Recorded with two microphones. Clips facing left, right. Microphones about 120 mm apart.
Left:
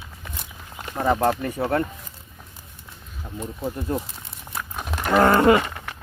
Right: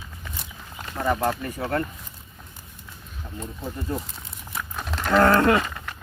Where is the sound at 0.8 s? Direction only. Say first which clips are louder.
Left 3 dB; 20° left (ahead or behind).